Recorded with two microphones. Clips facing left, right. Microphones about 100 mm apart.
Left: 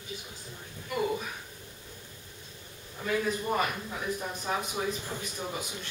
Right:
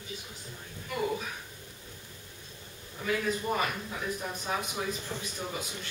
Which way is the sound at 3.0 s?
5° left (ahead or behind).